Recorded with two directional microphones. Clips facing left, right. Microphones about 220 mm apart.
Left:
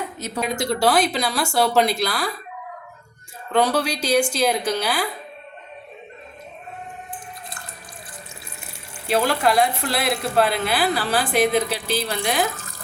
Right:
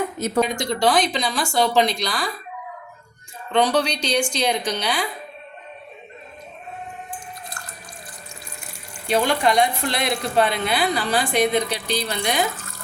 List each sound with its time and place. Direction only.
0.4 s speech: 5° left (ahead or behind)
3.5 s speech: 5° left (ahead or behind)
8.6 s speech: 5° left (ahead or behind)